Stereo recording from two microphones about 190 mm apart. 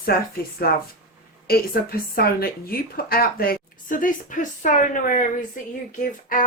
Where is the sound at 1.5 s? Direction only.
55° left (ahead or behind).